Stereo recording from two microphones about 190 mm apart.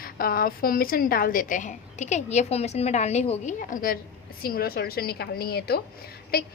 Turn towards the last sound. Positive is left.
turn(degrees=55)  # may be behind; listen again after turning